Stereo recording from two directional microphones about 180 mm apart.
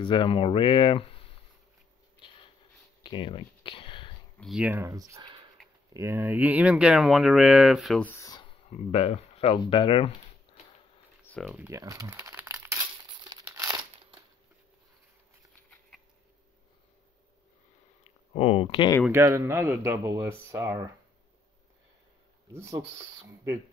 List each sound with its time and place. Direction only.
0.0 s speech: 25° left (ahead or behind)
2.1 s writing: 30° left (ahead or behind)
3.0 s a sound: 25° left (ahead or behind)
4.4 s speech: 5° right (ahead or behind); by 8.4 s 15° left (ahead or behind)
8.4 s speech: 35° left (ahead or behind)
11.2 s a sound: 5° left (ahead or behind)
11.5 s speech: 15° right (ahead or behind)
13.2 s crumpling: 20° right (ahead or behind)
18.0 s speech: 35° left (ahead or behind)
19.0 s speech: 15° right (ahead or behind)
22.5 s speech: 15° right (ahead or behind)